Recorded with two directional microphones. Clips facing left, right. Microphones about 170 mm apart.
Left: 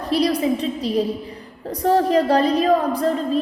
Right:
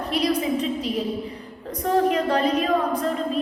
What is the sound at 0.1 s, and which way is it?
A woman's voice, 35° left (ahead or behind).